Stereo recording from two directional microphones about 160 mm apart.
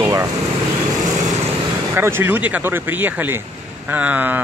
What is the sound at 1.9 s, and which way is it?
Speech, 15° right (ahead or behind).